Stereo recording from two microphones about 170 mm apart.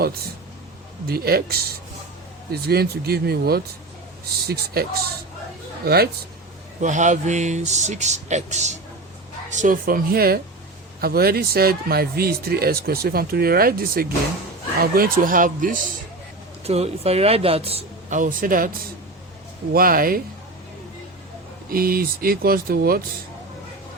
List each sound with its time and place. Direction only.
1.0 s speech: 65° right (ahead or behind)
6.8 s speech: 45° right (ahead or behind)
16.6 s speech: 35° right (ahead or behind)
18.1 s speech: 50° right (ahead or behind)
19.7 s speech: 55° right (ahead or behind)
21.7 s speech: 60° right (ahead or behind)